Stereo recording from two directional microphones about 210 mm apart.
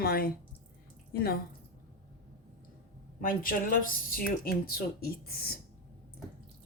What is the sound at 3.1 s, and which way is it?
A man's voice, 40° left (ahead or behind).